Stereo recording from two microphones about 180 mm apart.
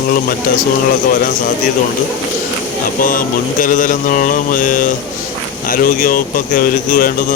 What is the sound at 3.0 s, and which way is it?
Speech, 50° left (ahead or behind).